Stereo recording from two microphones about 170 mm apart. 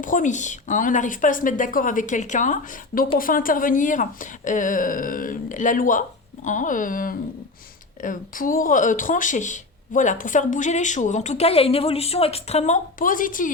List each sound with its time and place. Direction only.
0.0 s speech: 50° left (ahead or behind)